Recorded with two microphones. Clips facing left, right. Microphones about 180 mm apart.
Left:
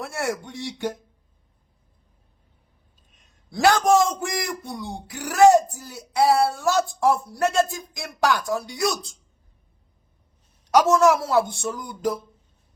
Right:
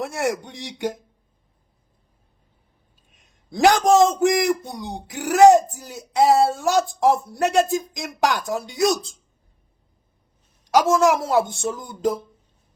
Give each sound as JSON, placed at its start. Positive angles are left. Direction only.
{"t": 0.0, "sound": "speech", "side_deg": -20}
{"t": 3.2, "sound": "a man's voice", "side_deg": -15}
{"t": 10.7, "sound": "speech", "side_deg": -15}